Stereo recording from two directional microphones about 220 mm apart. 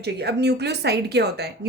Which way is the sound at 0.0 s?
50° right (ahead or behind).